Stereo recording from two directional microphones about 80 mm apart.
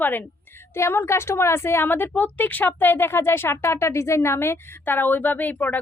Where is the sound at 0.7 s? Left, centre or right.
Left.